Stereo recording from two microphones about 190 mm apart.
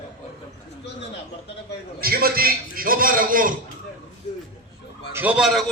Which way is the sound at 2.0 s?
50° right (ahead or behind).